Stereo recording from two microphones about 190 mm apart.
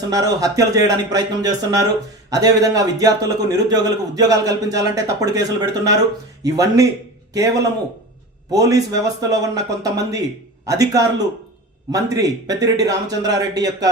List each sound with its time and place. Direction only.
0.1 s a man's voice: 20° right (ahead or behind)